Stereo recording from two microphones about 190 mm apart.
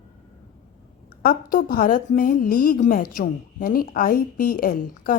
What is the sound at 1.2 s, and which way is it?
A woman's voice, 50° left (ahead or behind).